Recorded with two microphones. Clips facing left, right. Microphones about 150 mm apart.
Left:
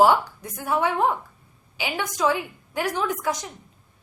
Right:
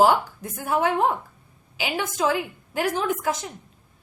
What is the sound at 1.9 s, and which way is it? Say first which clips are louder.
Speech: even; 25° right (ahead or behind).